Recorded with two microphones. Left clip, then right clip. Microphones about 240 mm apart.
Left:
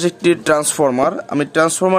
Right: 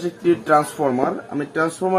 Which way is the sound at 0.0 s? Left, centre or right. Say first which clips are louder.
Left 5 dB; left.